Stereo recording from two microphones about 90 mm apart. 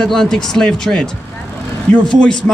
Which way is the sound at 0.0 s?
5° left (ahead or behind).